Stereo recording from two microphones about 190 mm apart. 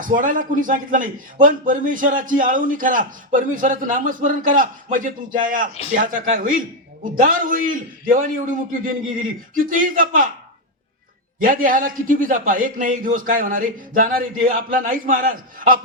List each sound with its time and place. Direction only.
0.0 s a man's voice: 45° right (ahead or behind)
11.3 s a man's voice: 45° right (ahead or behind)